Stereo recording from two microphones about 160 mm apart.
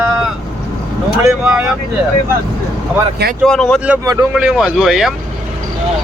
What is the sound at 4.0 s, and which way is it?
Speech, 20° right (ahead or behind).